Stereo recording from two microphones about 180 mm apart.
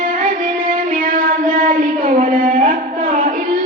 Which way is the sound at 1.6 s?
50° right (ahead or behind).